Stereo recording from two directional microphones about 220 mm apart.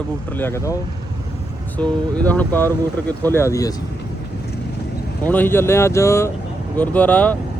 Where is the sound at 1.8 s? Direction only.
5° left (ahead or behind).